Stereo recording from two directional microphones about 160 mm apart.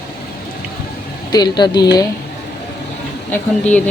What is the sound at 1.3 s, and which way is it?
Speech, 25° left (ahead or behind).